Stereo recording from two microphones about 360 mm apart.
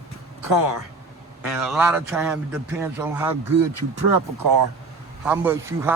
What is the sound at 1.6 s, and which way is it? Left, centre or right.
A man's voice, centre.